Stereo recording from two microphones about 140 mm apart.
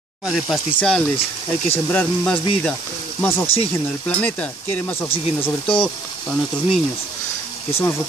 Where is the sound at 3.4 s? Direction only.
45° left (ahead or behind).